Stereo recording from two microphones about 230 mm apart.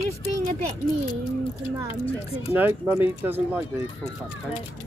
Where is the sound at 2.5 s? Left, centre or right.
Centre.